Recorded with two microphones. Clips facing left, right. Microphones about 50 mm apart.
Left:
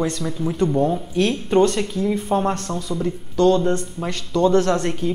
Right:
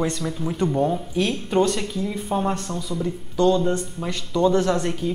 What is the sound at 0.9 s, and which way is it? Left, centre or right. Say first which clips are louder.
Speech: left 3 dB; centre.